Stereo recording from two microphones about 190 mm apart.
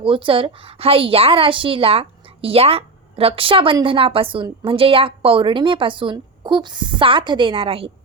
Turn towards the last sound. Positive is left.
turn(degrees=-30)  # may be behind; listen again after turning